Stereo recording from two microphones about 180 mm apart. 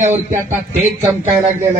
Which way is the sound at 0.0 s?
40° right (ahead or behind).